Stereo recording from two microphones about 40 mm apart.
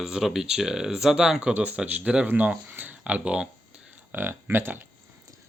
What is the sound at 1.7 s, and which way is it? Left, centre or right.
Speech, right.